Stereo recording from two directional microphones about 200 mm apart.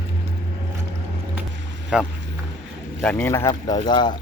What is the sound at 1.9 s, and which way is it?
Speech, 5° right (ahead or behind).